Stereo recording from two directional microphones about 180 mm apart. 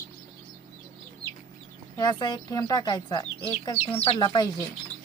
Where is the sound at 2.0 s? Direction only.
25° left (ahead or behind).